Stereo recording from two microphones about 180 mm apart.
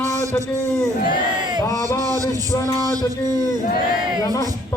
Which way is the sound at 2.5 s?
15° left (ahead or behind).